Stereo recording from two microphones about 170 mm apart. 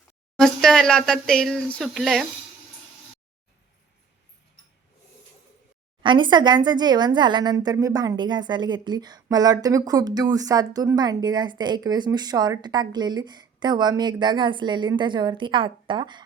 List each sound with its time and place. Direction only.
0.3 s speech: 5° left (ahead or behind)
6.0 s speech: 30° right (ahead or behind)